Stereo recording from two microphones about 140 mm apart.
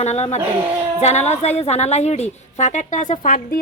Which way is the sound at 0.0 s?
55° left (ahead or behind).